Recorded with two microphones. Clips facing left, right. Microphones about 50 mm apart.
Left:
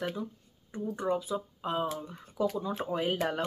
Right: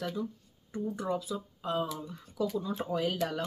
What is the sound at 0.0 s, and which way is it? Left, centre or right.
Speech, left.